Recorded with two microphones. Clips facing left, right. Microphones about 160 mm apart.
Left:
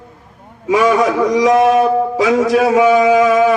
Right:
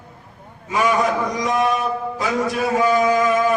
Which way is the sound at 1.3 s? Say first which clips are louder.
Left 9 dB; 90° left.